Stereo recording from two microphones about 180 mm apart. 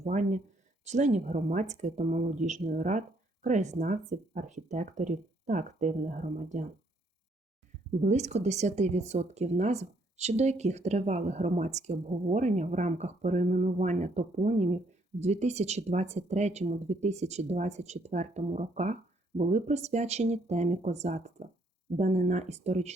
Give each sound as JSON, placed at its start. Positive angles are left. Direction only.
{"t": 0.0, "sound": "speech", "side_deg": -45}
{"t": 8.0, "sound": "speech", "side_deg": -40}